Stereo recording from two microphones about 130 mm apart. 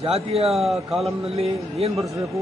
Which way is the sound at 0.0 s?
50° right (ahead or behind).